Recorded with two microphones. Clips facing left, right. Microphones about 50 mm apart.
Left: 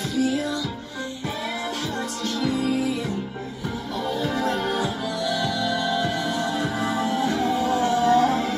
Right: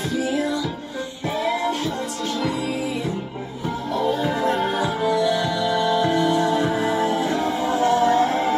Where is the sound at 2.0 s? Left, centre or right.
Right.